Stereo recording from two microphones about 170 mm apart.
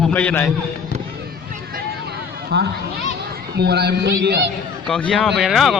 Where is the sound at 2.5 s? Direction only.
80° right.